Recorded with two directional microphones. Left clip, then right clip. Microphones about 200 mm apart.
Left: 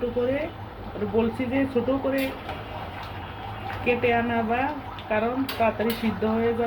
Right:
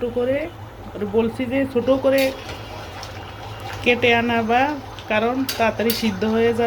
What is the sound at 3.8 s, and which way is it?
Speech, 50° right (ahead or behind).